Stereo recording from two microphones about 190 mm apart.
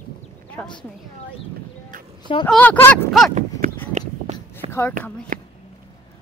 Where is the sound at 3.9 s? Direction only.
35° right (ahead or behind).